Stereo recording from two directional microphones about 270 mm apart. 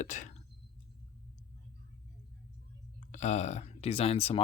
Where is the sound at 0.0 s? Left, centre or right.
Left.